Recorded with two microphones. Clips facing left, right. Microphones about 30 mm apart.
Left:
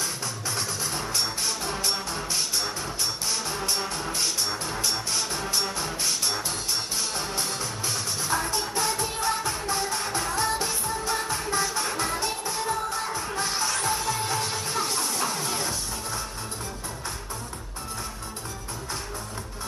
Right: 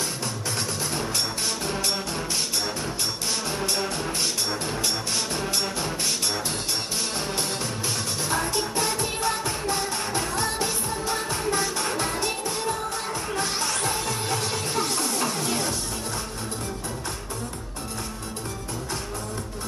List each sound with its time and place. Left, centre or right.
0.6 s music: right
4.8 s music: right
8.3 s music: right